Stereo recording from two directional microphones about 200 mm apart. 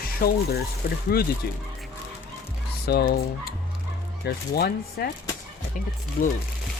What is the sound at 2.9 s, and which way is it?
Speech, 55° left (ahead or behind).